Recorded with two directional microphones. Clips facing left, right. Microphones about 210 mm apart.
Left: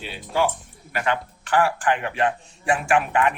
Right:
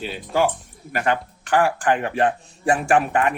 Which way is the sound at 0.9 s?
45° right (ahead or behind).